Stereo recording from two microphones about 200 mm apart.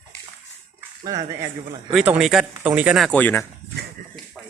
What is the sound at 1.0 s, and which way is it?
Speech, 20° right (ahead or behind).